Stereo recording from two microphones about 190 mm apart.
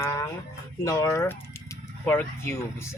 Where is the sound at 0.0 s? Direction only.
15° left (ahead or behind).